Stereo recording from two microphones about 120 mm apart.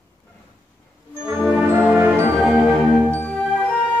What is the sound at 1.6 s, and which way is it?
Music, 15° right (ahead or behind).